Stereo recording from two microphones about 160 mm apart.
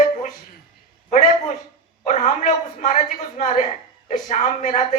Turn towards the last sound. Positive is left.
turn(degrees=45)  # may be behind; listen again after turning